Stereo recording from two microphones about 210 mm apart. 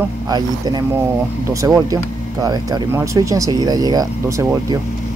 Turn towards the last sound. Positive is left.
turn(degrees=-15)  # may be behind; listen again after turning